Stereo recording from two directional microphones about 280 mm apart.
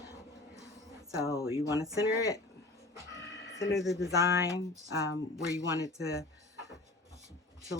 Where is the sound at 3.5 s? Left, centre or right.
Centre.